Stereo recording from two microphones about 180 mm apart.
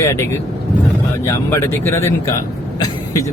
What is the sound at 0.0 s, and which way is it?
Speech, 15° left (ahead or behind).